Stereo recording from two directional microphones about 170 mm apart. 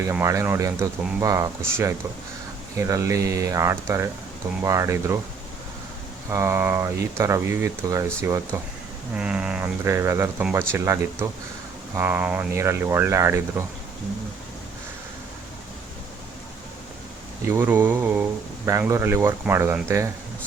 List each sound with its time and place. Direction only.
0.0 s speech: 15° right (ahead or behind)
6.3 s speech: 15° right (ahead or behind)
9.1 s speech: 5° right (ahead or behind)
17.5 s speech: 10° right (ahead or behind)